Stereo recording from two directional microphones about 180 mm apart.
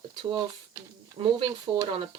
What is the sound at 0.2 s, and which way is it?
Speech, 30° right (ahead or behind).